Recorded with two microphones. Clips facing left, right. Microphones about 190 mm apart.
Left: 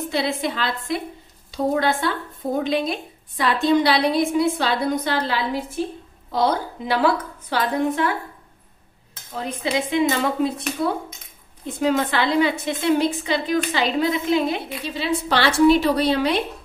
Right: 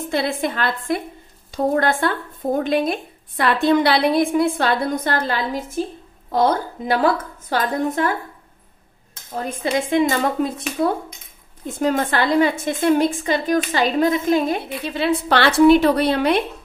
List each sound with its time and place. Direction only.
0.1 s a woman's voice: 50° right (ahead or behind)
9.4 s a woman's voice: 45° right (ahead or behind)
11.6 s a woman's voice: 45° right (ahead or behind)